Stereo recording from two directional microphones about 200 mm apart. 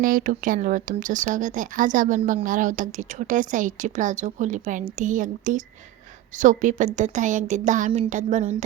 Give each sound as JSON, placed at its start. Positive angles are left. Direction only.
{"t": 0.0, "sound": "speech", "side_deg": -45}